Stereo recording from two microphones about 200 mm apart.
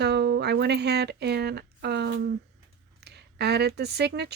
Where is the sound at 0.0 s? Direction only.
55° right (ahead or behind).